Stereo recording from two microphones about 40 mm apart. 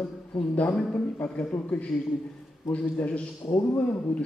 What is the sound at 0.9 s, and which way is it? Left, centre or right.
A man's voice, left.